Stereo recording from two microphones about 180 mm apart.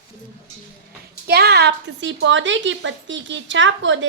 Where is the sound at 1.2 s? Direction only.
60° right (ahead or behind); by 3.9 s 90° right.